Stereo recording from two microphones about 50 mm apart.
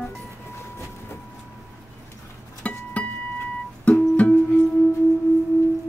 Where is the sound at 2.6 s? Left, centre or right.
Left.